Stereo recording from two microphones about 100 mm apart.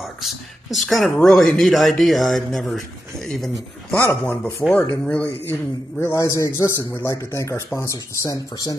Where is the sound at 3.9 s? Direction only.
15° left (ahead or behind).